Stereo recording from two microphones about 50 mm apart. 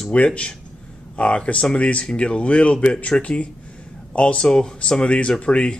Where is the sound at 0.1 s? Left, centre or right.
Left.